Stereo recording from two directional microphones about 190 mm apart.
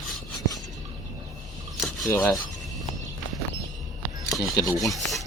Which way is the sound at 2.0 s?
15° left (ahead or behind).